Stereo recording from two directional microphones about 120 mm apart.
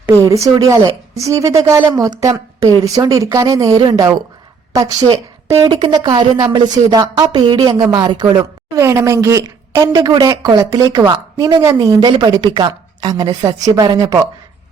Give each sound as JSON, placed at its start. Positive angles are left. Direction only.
{"t": 0.1, "sound": "a woman's voice", "side_deg": -25}
{"t": 8.8, "sound": "speech", "side_deg": -20}